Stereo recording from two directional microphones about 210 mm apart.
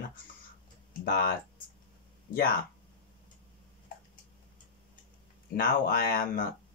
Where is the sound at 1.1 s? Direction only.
45° left (ahead or behind).